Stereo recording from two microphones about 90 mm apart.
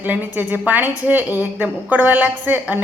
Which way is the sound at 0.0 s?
20° right (ahead or behind).